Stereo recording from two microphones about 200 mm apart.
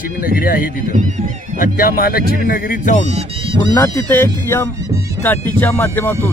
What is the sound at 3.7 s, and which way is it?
Speech, 10° left (ahead or behind).